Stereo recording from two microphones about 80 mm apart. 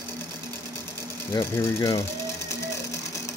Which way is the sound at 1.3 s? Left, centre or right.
Left.